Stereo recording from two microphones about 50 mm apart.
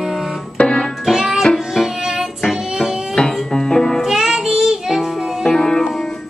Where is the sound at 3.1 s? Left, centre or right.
Centre.